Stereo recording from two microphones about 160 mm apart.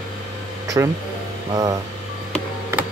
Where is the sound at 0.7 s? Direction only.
20° right (ahead or behind).